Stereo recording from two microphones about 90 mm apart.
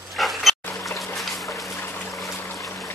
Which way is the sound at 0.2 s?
Centre (ahead or behind).